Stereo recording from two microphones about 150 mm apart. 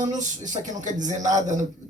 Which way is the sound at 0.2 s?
55° right (ahead or behind).